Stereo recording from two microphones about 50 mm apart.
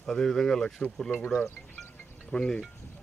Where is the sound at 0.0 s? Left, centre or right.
Centre.